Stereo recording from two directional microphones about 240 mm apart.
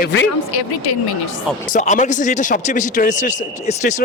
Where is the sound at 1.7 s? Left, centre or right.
Left.